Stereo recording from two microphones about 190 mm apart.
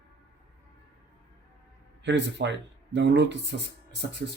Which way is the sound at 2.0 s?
70° right (ahead or behind).